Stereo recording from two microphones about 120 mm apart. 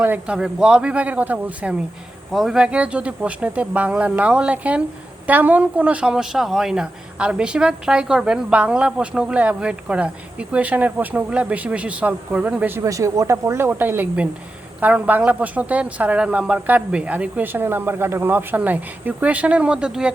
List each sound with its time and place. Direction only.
0.0 s speech: 15° right (ahead or behind)
12.8 s speech: 25° right (ahead or behind); by 20.1 s 5° right (ahead or behind)